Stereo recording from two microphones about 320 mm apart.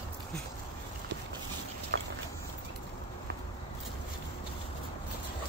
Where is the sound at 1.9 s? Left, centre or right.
Right.